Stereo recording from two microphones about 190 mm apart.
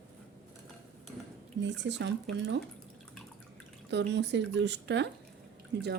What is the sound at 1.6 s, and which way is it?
Speech, 70° right (ahead or behind).